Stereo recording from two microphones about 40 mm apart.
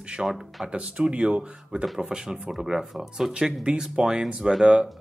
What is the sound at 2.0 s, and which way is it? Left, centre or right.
Speech, centre.